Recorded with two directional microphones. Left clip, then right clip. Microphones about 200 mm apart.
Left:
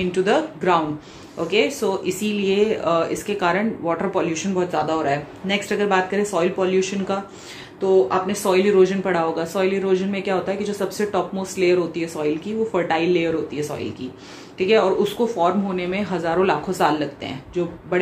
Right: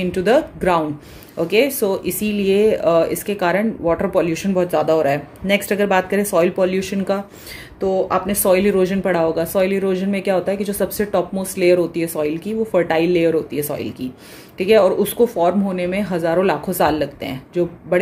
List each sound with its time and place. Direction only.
0.0 s speech: 50° right (ahead or behind)